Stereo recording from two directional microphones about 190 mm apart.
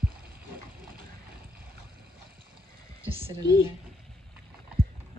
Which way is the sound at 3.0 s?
10° right (ahead or behind).